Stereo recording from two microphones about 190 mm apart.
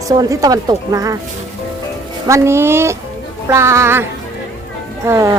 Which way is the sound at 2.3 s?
15° right (ahead or behind).